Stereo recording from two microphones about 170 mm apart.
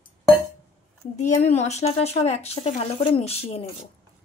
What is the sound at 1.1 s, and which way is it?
Speech, 40° left (ahead or behind).